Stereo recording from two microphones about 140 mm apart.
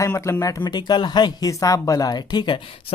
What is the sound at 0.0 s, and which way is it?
Speech, 20° left (ahead or behind).